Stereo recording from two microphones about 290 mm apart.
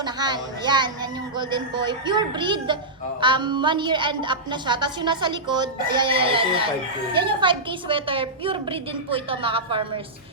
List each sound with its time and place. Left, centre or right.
0.0 s a woman's voice: centre